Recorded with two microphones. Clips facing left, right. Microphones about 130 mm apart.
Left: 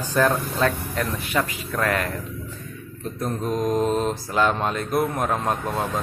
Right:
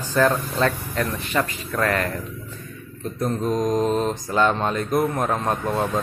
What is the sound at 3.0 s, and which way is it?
Mantra, centre (ahead or behind).